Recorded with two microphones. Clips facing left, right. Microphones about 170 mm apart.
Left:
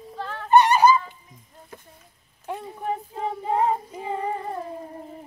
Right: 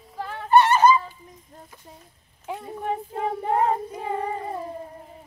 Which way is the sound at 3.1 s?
60° right (ahead or behind).